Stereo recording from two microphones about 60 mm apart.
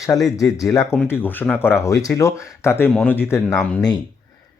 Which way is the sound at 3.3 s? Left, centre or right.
Left.